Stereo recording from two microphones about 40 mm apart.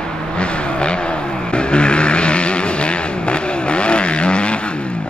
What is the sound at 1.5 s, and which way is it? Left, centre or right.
Vehicle, left.